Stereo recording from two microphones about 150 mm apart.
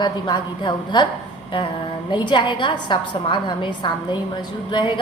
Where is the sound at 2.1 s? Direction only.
30° left (ahead or behind).